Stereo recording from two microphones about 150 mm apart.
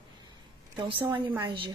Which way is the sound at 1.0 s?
20° right (ahead or behind).